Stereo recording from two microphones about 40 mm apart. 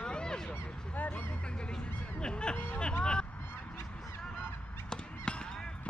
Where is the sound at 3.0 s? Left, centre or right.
Left.